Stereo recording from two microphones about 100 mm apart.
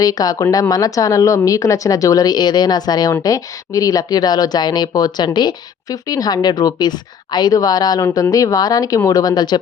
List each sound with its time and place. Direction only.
0.0 s speech: 40° left (ahead or behind)